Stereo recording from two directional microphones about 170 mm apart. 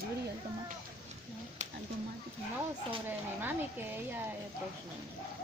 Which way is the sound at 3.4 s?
10° right (ahead or behind).